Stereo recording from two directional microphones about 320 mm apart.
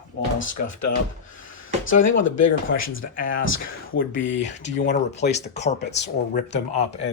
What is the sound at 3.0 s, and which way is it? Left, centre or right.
Speech, left.